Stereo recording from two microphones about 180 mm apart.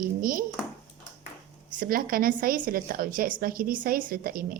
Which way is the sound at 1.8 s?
55° right (ahead or behind).